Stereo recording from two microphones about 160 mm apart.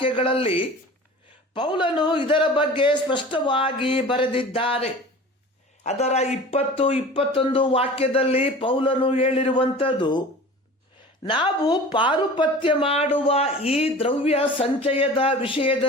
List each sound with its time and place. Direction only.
0.0 s speech: 35° left (ahead or behind)
11.3 s speech: 30° left (ahead or behind)